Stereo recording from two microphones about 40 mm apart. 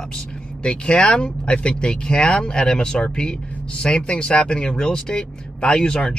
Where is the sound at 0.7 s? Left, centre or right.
Left.